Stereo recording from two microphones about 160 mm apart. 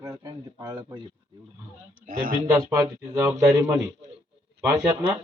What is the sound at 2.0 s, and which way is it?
Speech, 60° right (ahead or behind).